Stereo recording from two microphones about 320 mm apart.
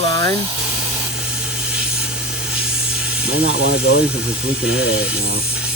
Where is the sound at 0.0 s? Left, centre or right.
Centre.